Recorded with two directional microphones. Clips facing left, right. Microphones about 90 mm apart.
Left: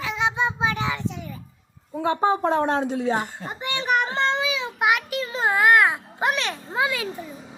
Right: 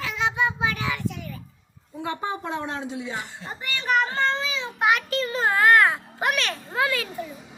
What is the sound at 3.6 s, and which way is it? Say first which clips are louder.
Child singing: left 1 dB; 20° left (ahead or behind).